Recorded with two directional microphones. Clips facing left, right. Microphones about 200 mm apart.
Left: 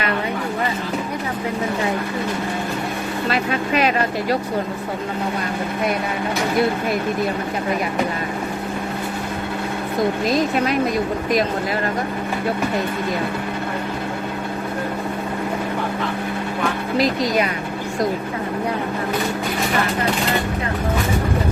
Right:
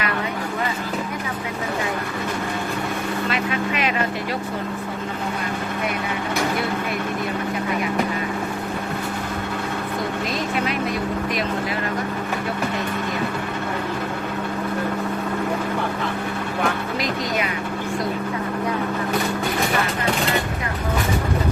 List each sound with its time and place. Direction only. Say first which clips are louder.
3.2 s speech: left 5 dB; 40° left (ahead or behind)